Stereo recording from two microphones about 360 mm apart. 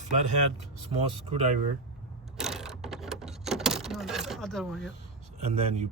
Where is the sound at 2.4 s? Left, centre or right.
Centre.